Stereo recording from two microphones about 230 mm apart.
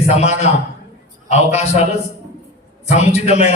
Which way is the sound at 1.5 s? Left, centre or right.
Left.